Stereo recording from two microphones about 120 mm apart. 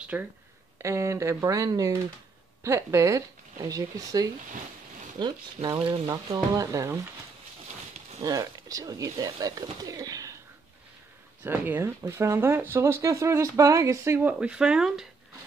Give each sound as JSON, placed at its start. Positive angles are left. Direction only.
{"t": 0.1, "sound": "speech", "side_deg": -10}
{"t": 0.7, "sound": "speech", "side_deg": -25}
{"t": 5.2, "sound": "speech", "side_deg": -40}
{"t": 5.6, "sound": "speech", "side_deg": -70}
{"t": 6.0, "sound": "speech", "side_deg": -30}
{"t": 8.2, "sound": "speech", "side_deg": -30}
{"t": 11.4, "sound": "speech", "side_deg": -15}
{"t": 14.4, "sound": "speech", "side_deg": -5}